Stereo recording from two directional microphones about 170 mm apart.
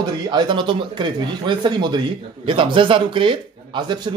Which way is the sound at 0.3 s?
30° right (ahead or behind).